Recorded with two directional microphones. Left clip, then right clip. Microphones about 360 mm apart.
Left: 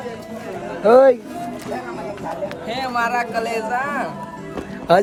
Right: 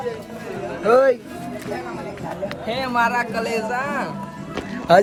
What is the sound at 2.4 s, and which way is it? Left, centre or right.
Speech, centre.